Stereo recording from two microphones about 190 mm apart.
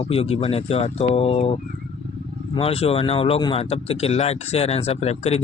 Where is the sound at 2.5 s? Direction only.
30° left (ahead or behind).